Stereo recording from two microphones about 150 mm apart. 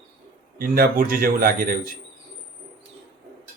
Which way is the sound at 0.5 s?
75° right (ahead or behind).